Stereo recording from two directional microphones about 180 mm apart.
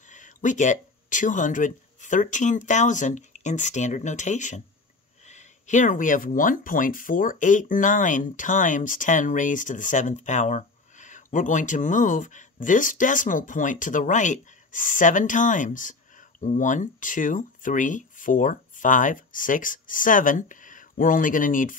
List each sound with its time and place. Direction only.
0.1 s speech: 45° left (ahead or behind)